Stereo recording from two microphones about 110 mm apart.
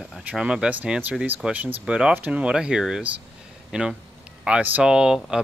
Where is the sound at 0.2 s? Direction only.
10° right (ahead or behind).